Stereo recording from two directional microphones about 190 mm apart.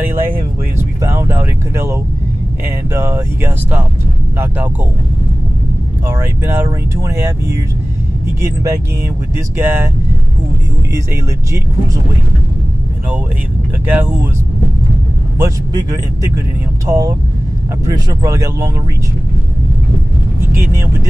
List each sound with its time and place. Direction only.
0.0 s music: 10° right (ahead or behind)
2.9 s speech: 15° right (ahead or behind)
6.0 s speech: 15° right (ahead or behind)
13.8 s speech: 10° right (ahead or behind)
15.3 s speech: 15° right (ahead or behind)
20.3 s vehicle: 15° right (ahead or behind)